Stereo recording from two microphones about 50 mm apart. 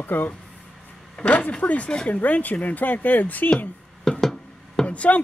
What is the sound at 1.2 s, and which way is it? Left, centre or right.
Speech, left.